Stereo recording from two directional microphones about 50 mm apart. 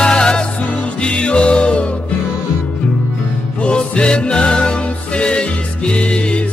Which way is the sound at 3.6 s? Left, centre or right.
Left.